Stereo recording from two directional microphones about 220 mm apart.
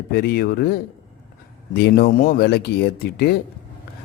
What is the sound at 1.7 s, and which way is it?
Speech, 45° left (ahead or behind).